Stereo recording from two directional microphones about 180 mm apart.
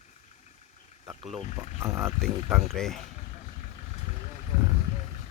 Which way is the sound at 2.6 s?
Centre (ahead or behind).